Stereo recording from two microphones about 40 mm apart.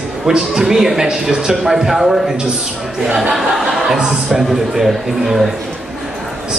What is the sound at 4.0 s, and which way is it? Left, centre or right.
A man's voice, centre.